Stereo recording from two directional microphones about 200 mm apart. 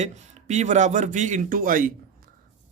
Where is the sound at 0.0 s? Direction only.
35° right (ahead or behind).